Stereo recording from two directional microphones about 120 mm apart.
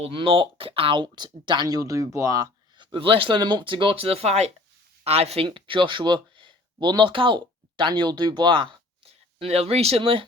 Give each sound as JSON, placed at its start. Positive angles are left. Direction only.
{"t": 0.0, "sound": "speech", "side_deg": -45}
{"t": 5.5, "sound": "speech", "side_deg": -45}
{"t": 9.0, "sound": "speech", "side_deg": -60}